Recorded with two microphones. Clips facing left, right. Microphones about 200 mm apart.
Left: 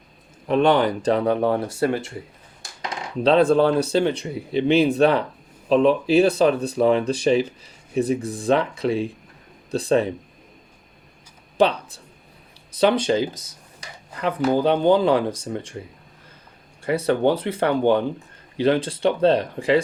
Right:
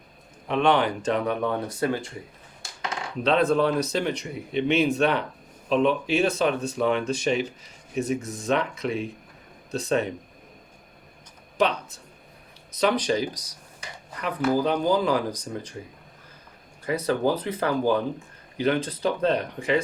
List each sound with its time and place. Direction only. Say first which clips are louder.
0.4 s speech: left 4 dB; 40° left (ahead or behind)
3.2 s speech: left 5 dB; 30° left (ahead or behind)
11.5 s speech: left 5 dB; 30° left (ahead or behind)
16.8 s speech: left 4 dB; 30° left (ahead or behind)